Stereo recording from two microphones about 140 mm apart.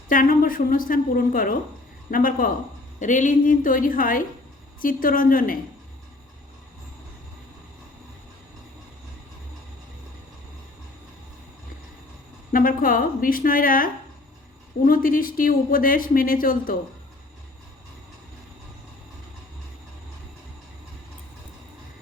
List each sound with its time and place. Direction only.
0.1 s speech: 80° left
3.0 s a woman's voice: 65° left (ahead or behind); by 5.5 s 80° left
12.5 s speech: 80° left